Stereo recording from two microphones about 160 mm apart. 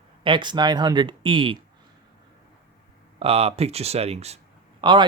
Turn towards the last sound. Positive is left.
turn(degrees=-30)  # may be behind; listen again after turning